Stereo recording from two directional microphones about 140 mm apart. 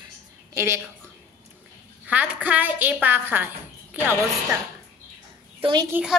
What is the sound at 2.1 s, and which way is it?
A woman's voice, 10° right (ahead or behind).